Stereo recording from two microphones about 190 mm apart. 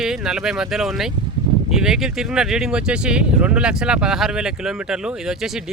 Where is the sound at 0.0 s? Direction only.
Centre (ahead or behind).